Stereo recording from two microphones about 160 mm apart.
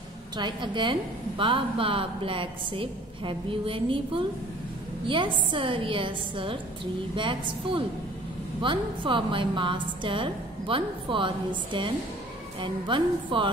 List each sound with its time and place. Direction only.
0.4 s a woman's voice: 30° right (ahead or behind)